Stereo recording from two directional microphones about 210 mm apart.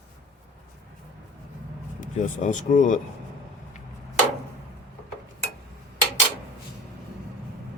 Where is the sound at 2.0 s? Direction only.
35° left (ahead or behind).